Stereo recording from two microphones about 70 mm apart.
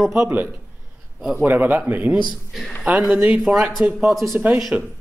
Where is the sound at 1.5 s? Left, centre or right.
Right; by 3.8 s centre.